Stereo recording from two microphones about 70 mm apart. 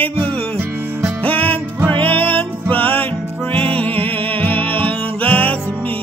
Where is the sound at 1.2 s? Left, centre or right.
Left.